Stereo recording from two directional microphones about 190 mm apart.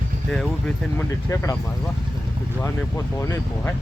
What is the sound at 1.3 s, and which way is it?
Speech, 15° left (ahead or behind).